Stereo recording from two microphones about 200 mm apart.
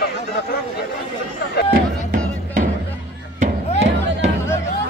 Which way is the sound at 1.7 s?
45° right (ahead or behind).